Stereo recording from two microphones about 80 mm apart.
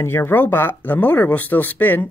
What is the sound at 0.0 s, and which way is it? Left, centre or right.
Speech, left.